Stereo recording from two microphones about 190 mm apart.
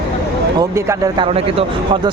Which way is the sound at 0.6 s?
20° right (ahead or behind).